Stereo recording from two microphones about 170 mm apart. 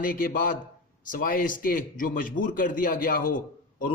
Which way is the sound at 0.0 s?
55° left (ahead or behind).